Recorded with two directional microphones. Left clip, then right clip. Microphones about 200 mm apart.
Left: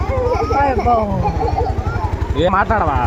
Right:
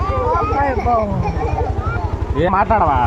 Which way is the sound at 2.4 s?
15° right (ahead or behind).